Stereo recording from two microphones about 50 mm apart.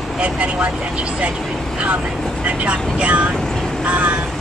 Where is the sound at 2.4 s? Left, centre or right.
Right.